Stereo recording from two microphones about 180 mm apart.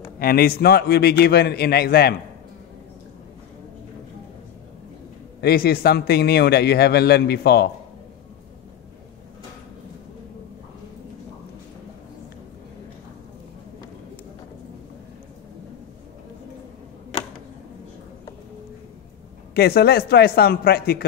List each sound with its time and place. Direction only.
0.2 s a man's voice: 55° left (ahead or behind)
5.4 s a man's voice: 60° left (ahead or behind)
19.5 s a man's voice: 60° left (ahead or behind)